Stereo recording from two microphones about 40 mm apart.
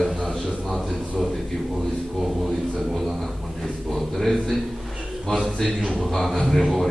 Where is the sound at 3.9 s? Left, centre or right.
Centre.